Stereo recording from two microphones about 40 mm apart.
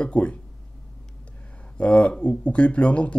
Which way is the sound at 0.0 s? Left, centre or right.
Left.